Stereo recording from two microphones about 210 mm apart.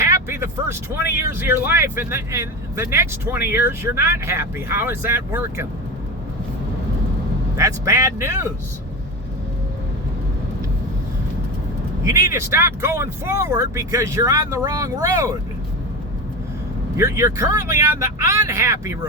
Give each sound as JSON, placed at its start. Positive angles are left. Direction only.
{"t": 0.0, "sound": "vehicle", "side_deg": -10}
{"t": 1.3, "sound": "speech", "side_deg": -10}
{"t": 7.5, "sound": "speech", "side_deg": -15}
{"t": 12.2, "sound": "speech", "side_deg": -15}
{"t": 17.0, "sound": "speech", "side_deg": -10}